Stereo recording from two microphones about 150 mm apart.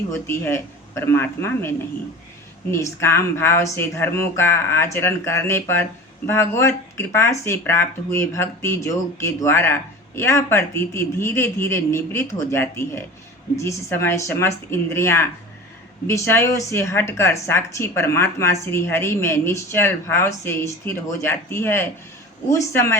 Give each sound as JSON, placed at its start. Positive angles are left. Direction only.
{"t": 0.1, "sound": "speech", "side_deg": 15}